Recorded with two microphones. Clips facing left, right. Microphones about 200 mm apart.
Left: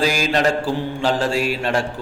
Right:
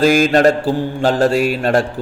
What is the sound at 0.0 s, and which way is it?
Mantra, 50° right (ahead or behind).